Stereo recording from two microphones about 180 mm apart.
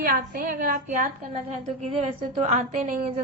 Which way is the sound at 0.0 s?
55° right (ahead or behind).